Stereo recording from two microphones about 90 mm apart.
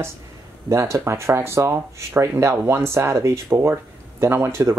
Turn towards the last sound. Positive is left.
turn(degrees=-30)  # may be behind; listen again after turning